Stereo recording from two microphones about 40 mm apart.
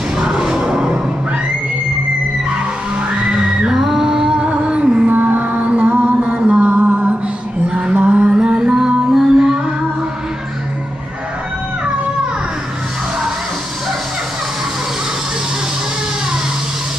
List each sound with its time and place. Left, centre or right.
0.2 s music: centre
3.3 s music: right
3.7 s music: centre; by 5.0 s right
5.0 s music: right
5.6 s music: right
6.6 s music: right
8.3 s music: right